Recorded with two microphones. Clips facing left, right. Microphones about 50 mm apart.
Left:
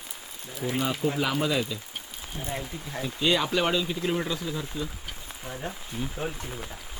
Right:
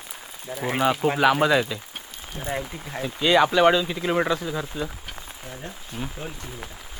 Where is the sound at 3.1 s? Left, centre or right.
Right.